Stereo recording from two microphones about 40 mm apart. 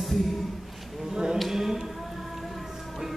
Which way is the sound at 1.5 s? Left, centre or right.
Centre.